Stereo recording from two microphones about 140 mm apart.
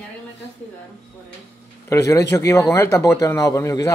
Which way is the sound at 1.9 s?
20° left (ahead or behind).